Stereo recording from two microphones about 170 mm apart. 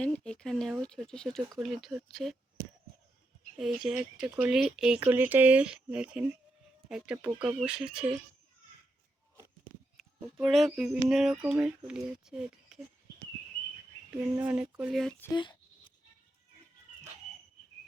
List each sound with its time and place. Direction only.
0.0 s speech: 5° left (ahead or behind)
3.6 s speech: 5° right (ahead or behind)
10.2 s speech: 10° right (ahead or behind)
14.3 s speech: 10° right (ahead or behind)
15.2 s speech: 25° left (ahead or behind)